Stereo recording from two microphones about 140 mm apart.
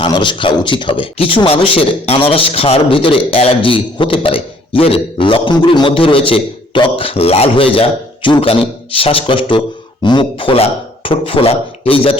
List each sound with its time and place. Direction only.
0.0 s speech: 35° left (ahead or behind)